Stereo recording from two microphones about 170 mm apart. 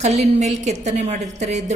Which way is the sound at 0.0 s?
40° right (ahead or behind).